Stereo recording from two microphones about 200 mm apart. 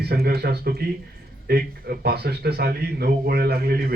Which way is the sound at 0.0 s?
50° right (ahead or behind).